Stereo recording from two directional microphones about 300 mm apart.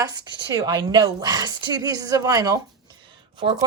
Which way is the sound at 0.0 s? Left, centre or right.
Centre.